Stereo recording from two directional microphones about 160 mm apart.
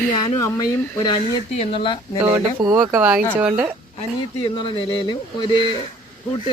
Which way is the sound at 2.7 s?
5° right (ahead or behind).